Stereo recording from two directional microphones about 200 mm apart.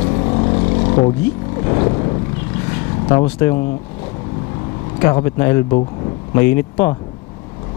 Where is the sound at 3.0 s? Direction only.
20° left (ahead or behind).